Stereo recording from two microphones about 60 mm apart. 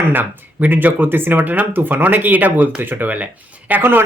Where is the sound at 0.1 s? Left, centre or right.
Right.